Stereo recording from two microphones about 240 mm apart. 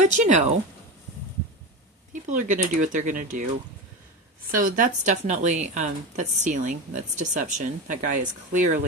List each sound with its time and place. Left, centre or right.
0.0 s speech: right
2.4 s speech: right
4.5 s speech: right